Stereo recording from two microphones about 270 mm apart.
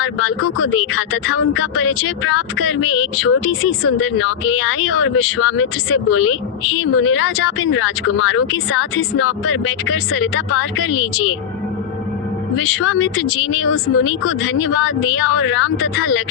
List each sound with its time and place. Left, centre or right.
0.0 s speech: left
12.5 s speech: left